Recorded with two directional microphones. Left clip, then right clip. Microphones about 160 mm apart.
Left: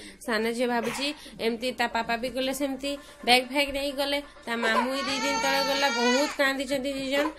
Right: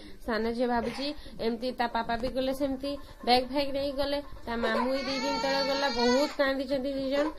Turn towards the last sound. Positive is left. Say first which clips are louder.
# left 2 dB
turn(degrees=20)  # may be behind; listen again after turning